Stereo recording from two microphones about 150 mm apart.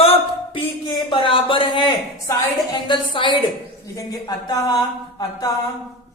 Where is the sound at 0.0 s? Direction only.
40° left (ahead or behind).